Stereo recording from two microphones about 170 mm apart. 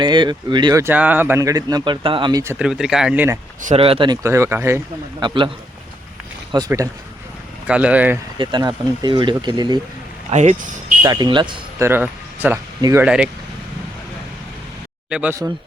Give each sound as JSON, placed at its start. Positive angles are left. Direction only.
{"t": 0.0, "sound": "speech", "side_deg": -25}
{"t": 2.4, "sound": "speech", "side_deg": -15}
{"t": 2.6, "sound": "speech", "side_deg": -5}
{"t": 3.8, "sound": "speech", "side_deg": -35}
{"t": 4.2, "sound": "speech", "side_deg": -15}
{"t": 5.2, "sound": "speech", "side_deg": -30}
{"t": 6.5, "sound": "speech", "side_deg": -25}
{"t": 7.7, "sound": "speech", "side_deg": -5}
{"t": 8.4, "sound": "speech", "side_deg": -25}
{"t": 10.2, "sound": "speech", "side_deg": -45}
{"t": 11.0, "sound": "speech", "side_deg": -25}
{"t": 11.8, "sound": "speech", "side_deg": -10}
{"t": 13.1, "sound": "speech", "side_deg": -5}
{"t": 15.1, "sound": "speech", "side_deg": -10}